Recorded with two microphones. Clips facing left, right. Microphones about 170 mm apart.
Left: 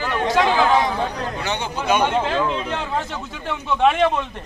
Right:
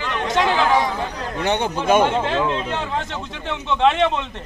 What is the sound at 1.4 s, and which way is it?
Speech, 55° right (ahead or behind).